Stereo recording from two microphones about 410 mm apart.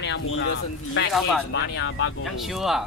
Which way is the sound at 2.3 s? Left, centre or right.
Centre.